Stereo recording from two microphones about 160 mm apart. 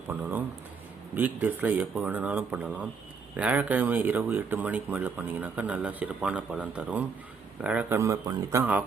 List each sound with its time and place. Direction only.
0.1 s a sound: 10° right (ahead or behind)
1.1 s speech: 10° right (ahead or behind)
7.9 s speech: 20° right (ahead or behind)